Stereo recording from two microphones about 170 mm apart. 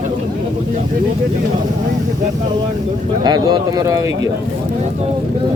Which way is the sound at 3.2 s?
25° right (ahead or behind).